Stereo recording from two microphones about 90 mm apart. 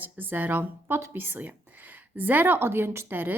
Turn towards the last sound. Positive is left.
turn(degrees=-20)  # may be behind; listen again after turning